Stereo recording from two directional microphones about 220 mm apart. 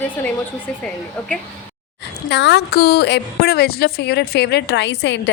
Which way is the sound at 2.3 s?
50° left (ahead or behind).